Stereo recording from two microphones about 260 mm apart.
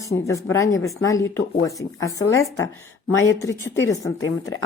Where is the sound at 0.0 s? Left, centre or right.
Centre.